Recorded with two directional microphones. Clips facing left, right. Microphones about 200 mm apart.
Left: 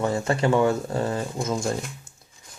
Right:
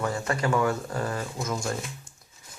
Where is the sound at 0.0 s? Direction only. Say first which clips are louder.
Left 5 dB; 25° left (ahead or behind).